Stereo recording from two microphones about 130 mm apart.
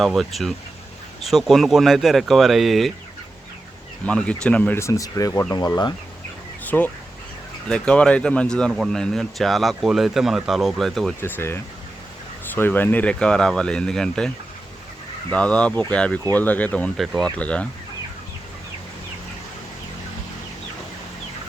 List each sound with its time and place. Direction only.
0.0 s speech: centre (ahead or behind)
4.0 s speech: 10° left (ahead or behind)
5.5 s speech: 30° left (ahead or behind)
6.7 s speech: 15° left (ahead or behind)
11.2 s speech: 20° left (ahead or behind)
15.3 s speech: 10° left (ahead or behind)